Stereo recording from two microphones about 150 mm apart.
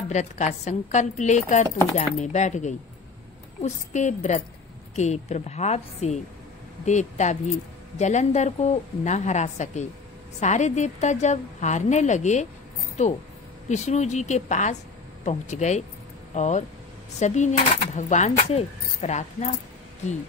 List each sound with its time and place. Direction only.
0.1 s cutlery: 50° left (ahead or behind)
13.7 s cutlery: 50° left (ahead or behind)